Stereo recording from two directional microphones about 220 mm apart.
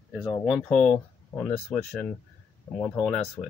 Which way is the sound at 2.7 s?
5° left (ahead or behind).